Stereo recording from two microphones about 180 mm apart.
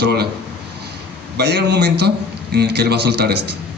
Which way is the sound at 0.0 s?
65° right (ahead or behind).